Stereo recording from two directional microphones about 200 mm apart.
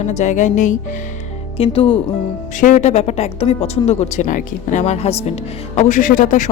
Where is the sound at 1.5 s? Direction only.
25° left (ahead or behind).